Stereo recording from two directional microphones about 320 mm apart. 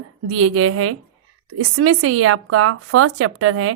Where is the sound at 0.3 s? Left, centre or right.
Right.